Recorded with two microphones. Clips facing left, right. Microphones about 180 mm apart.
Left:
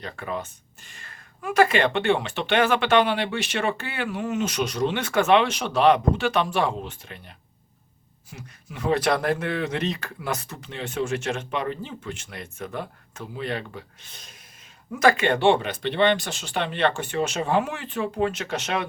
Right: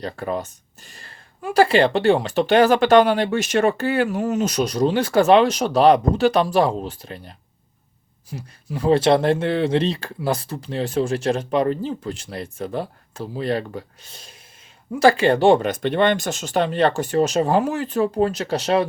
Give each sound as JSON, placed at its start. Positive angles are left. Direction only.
{"t": 0.0, "sound": "speech", "side_deg": -35}